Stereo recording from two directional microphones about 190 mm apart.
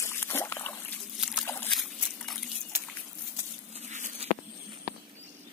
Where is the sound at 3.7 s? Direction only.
35° right (ahead or behind).